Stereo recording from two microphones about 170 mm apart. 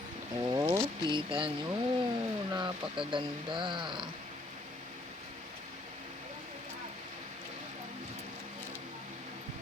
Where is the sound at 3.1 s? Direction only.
30° right (ahead or behind).